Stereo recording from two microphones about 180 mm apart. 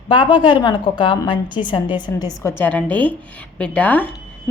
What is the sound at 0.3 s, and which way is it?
A woman's voice, 25° left (ahead or behind).